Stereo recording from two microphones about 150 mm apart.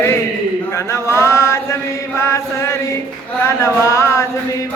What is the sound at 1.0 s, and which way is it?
Chant, 20° left (ahead or behind).